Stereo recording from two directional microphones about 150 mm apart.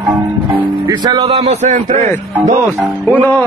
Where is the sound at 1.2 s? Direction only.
45° right (ahead or behind).